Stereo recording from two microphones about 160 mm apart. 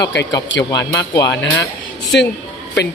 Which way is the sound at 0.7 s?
25° left (ahead or behind).